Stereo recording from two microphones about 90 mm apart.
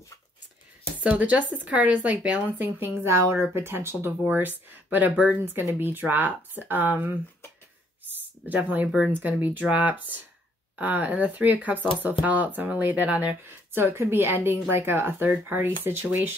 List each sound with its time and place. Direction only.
0.9 s speech: 15° right (ahead or behind)
8.6 s speech: 15° right (ahead or behind)